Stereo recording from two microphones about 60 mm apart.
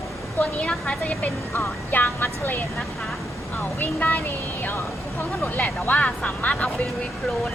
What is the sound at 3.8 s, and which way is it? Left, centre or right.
Speech, left.